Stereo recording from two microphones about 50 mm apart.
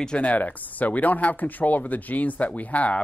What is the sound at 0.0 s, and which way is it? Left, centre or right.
Speech, left.